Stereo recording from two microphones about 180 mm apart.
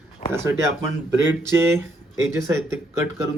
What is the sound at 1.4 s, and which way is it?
Speech, 15° right (ahead or behind).